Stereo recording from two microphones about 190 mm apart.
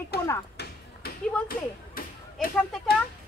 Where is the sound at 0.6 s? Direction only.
60° left (ahead or behind).